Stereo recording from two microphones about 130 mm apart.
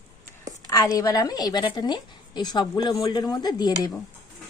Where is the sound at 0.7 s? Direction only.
25° left (ahead or behind).